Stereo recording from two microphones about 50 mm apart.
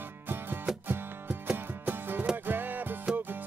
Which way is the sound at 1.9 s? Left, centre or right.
Right.